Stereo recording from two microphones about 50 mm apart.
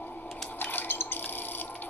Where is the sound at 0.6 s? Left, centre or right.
Left.